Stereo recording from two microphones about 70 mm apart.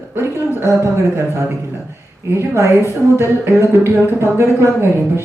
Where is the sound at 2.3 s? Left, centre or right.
Right.